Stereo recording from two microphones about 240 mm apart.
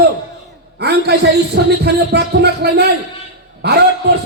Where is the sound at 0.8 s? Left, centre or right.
Right.